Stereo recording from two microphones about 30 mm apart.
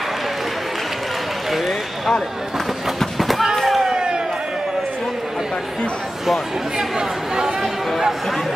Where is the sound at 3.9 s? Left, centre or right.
Right.